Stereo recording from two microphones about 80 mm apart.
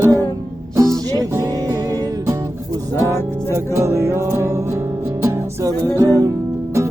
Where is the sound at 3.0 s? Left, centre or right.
Right.